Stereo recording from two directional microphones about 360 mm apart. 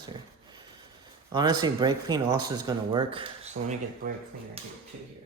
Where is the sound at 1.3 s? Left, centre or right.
Centre.